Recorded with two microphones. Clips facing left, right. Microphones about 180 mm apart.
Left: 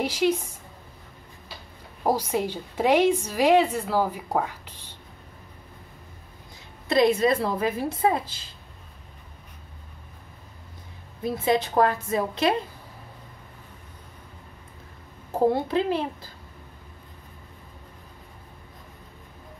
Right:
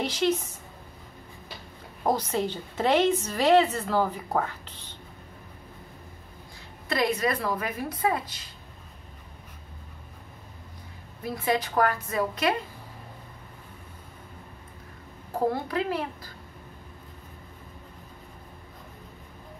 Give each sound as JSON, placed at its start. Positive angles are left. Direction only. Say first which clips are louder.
{"t": 0.0, "sound": "speech", "louder": "left 2 dB", "side_deg": 10}
{"t": 2.0, "sound": "a woman's voice", "louder": "left 2 dB", "side_deg": 10}
{"t": 6.9, "sound": "a woman's voice", "louder": "left 6 dB", "side_deg": 25}
{"t": 11.2, "sound": "a woman's voice", "louder": "left 4 dB", "side_deg": 25}
{"t": 15.3, "sound": "a woman's voice", "louder": "left 5 dB", "side_deg": 25}